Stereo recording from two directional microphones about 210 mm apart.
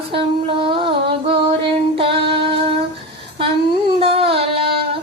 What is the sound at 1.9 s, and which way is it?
Female singing, 25° right (ahead or behind).